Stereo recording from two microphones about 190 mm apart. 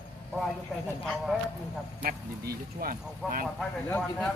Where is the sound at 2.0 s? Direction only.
50° right (ahead or behind).